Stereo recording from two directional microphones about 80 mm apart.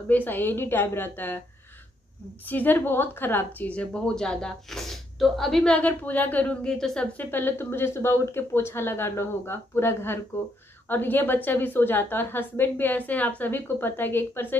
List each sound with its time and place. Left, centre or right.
0.1 s a woman's voice: left
2.4 s a woman's voice: left; by 5.8 s centre
5.8 s a woman's voice: centre
6.6 s a woman's voice: centre
7.2 s a woman's voice: left